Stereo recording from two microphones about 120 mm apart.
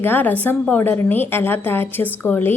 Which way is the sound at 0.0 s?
15° left (ahead or behind).